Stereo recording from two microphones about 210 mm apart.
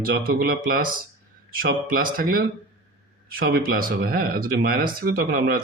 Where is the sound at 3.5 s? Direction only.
45° right (ahead or behind).